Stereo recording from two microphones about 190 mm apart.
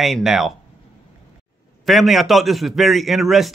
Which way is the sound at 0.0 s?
Centre (ahead or behind).